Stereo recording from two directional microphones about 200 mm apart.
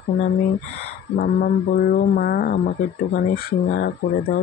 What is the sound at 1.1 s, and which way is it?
Speech, 50° left (ahead or behind).